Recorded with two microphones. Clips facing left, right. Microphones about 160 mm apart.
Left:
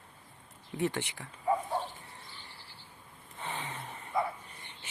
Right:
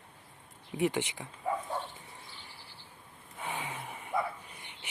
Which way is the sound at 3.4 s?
10° right (ahead or behind).